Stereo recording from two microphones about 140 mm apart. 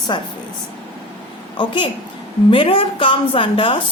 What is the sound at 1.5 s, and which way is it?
A woman's voice, 35° left (ahead or behind).